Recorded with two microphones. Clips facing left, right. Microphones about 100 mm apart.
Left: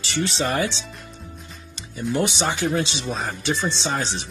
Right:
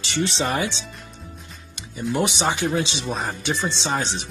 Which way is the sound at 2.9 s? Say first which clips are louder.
Right 1 dB; 5° right (ahead or behind).